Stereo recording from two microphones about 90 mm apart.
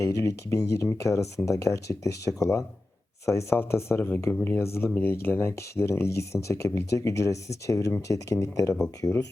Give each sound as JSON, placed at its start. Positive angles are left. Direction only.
{"t": 0.0, "sound": "speech", "side_deg": 35}